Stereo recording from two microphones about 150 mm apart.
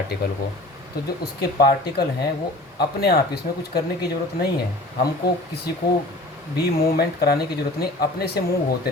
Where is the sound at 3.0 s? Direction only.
85° left.